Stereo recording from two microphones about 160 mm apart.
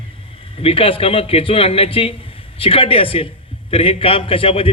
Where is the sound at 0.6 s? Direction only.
35° left (ahead or behind).